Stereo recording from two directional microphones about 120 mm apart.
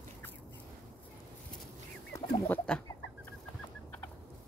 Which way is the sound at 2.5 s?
10° left (ahead or behind).